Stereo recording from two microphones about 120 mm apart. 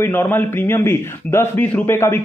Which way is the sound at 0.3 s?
20° left (ahead or behind).